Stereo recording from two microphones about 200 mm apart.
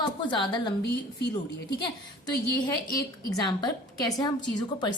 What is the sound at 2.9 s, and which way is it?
A woman's voice, 20° left (ahead or behind).